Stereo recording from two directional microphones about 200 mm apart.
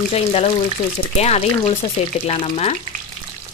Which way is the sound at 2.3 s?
30° left (ahead or behind).